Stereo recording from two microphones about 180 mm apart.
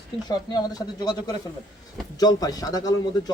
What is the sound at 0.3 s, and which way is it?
A man's voice, 20° left (ahead or behind).